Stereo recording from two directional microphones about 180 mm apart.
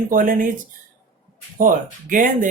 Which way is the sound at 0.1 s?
50° right (ahead or behind).